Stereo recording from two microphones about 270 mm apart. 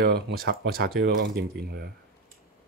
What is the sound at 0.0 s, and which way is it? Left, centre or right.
Speech, right.